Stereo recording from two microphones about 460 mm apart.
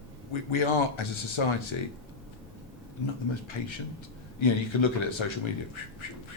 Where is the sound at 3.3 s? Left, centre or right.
Left.